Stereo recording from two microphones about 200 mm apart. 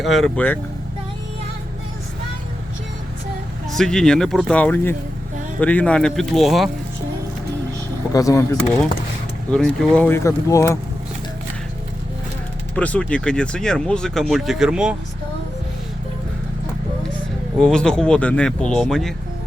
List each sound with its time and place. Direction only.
0.0 s speech: centre (ahead or behind)
3.7 s speech: centre (ahead or behind)
8.1 s speech: 15° left (ahead or behind)
9.5 s speech: 5° left (ahead or behind)
12.7 s speech: 5° left (ahead or behind)
17.6 s speech: 5° left (ahead or behind)